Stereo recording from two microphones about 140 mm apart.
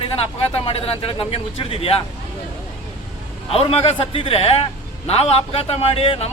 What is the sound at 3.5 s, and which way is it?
A man's voice, 45° left (ahead or behind).